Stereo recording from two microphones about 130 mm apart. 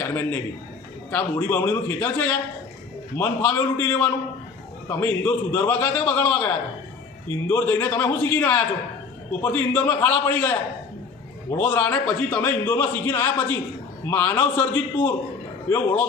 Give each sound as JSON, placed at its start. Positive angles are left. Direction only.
{"t": 0.0, "sound": "a man's voice", "side_deg": 15}
{"t": 11.5, "sound": "a man's voice", "side_deg": 15}